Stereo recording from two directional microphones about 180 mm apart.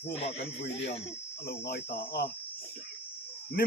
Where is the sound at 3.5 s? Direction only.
60° left (ahead or behind).